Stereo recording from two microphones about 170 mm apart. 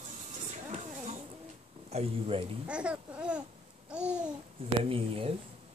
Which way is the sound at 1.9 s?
35° right (ahead or behind).